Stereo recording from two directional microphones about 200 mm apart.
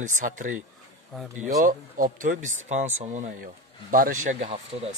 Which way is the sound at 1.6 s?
45° right (ahead or behind).